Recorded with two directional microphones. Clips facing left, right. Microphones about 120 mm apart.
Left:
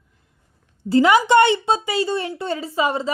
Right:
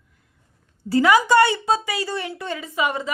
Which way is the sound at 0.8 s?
25° left (ahead or behind).